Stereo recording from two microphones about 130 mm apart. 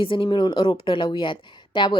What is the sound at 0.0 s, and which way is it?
A woman's voice, 40° left (ahead or behind).